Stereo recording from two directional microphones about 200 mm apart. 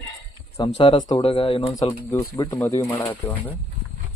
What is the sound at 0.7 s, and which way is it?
Speech, 20° left (ahead or behind).